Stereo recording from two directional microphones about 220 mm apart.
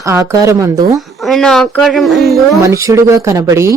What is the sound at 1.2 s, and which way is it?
Speech, centre (ahead or behind).